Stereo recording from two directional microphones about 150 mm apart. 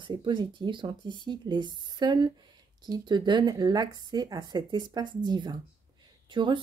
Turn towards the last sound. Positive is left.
turn(degrees=-30)  # may be behind; listen again after turning